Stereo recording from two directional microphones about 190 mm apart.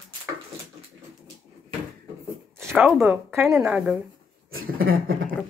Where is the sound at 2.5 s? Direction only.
10° right (ahead or behind).